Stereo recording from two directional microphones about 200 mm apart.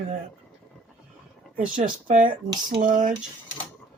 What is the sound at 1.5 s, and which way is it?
Speech, 40° right (ahead or behind).